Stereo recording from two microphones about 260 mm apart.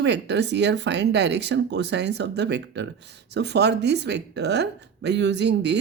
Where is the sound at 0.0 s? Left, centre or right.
Right.